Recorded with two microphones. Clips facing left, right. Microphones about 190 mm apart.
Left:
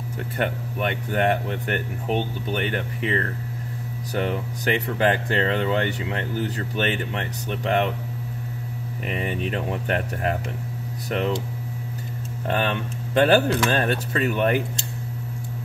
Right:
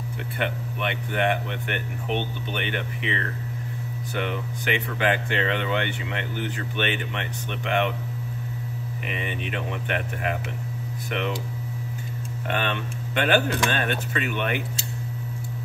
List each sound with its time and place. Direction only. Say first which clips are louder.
0.4 s speech: left 3 dB; 40° left (ahead or behind)
9.0 s speech: left 5 dB; 40° left (ahead or behind)
12.4 s speech: left 3 dB; 35° left (ahead or behind)